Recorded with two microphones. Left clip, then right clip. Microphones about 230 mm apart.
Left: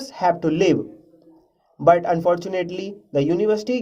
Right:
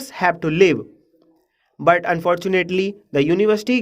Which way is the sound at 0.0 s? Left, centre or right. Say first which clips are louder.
Right 1 dB; right.